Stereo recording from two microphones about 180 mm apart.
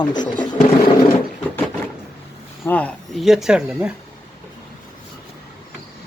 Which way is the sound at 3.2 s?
Centre (ahead or behind).